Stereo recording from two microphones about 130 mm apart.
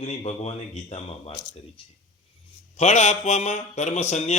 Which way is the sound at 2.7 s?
60° left (ahead or behind).